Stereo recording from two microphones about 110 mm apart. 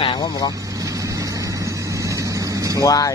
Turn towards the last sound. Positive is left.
turn(degrees=30)  # may be behind; listen again after turning